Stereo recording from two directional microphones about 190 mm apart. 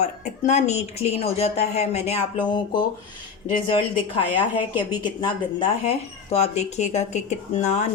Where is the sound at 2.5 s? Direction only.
25° left (ahead or behind).